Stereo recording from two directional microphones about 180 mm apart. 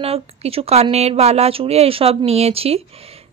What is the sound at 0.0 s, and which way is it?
Speech, 35° right (ahead or behind).